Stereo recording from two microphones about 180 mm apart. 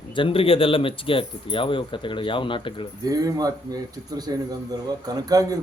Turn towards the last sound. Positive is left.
turn(degrees=-20)  # may be behind; listen again after turning